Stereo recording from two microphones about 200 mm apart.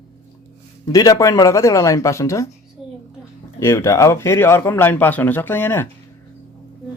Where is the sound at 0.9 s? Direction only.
20° left (ahead or behind).